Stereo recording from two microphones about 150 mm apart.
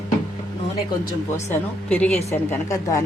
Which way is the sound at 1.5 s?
10° left (ahead or behind).